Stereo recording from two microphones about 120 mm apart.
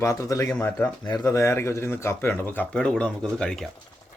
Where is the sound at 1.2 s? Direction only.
25° left (ahead or behind); by 3.7 s 5° left (ahead or behind).